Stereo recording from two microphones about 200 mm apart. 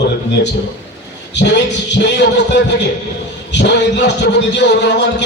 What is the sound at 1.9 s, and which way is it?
Speech, 60° left (ahead or behind).